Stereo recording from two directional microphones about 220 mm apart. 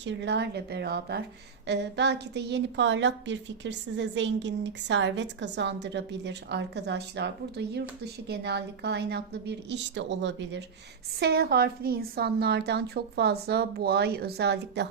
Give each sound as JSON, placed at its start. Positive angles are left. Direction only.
{"t": 0.0, "sound": "a woman's voice", "side_deg": -55}